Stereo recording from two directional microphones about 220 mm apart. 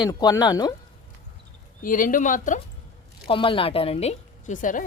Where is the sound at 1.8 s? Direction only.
40° left (ahead or behind).